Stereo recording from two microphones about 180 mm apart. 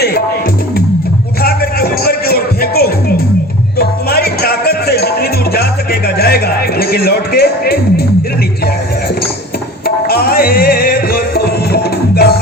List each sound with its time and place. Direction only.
1.4 s music: 60° left (ahead or behind)
9.8 s music: 60° left (ahead or behind)